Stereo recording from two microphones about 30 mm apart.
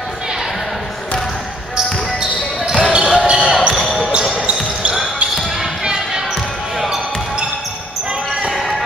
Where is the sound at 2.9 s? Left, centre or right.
Right.